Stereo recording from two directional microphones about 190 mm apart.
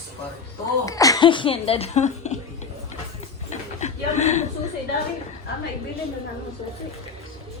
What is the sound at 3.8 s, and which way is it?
Chuckle, 35° left (ahead or behind).